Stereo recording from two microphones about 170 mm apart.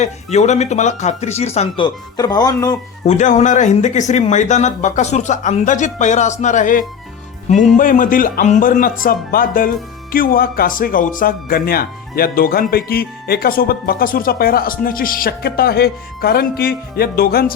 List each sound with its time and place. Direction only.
0.0 s speech: 40° left (ahead or behind); by 2.7 s 20° left (ahead or behind)
3.1 s speech: 45° left (ahead or behind); by 17.4 s 65° left (ahead or behind)